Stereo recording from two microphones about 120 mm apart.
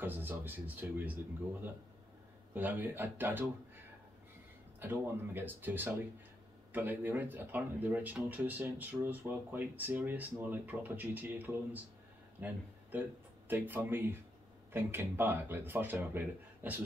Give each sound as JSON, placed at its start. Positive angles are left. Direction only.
{"t": 0.0, "sound": "speech", "side_deg": -15}
{"t": 4.7, "sound": "speech", "side_deg": -15}